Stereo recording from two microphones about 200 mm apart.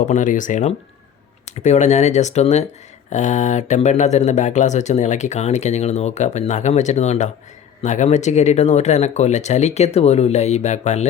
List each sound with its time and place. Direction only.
0.0 s speech: 40° left (ahead or behind)